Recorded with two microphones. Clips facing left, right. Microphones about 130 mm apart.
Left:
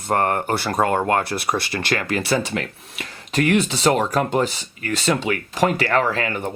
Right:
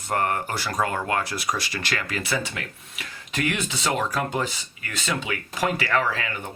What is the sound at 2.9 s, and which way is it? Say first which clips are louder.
Speech: left 8 dB; 35° left (ahead or behind).